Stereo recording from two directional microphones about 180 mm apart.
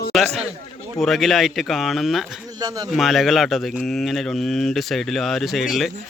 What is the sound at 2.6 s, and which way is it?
Speech, 20° right (ahead or behind).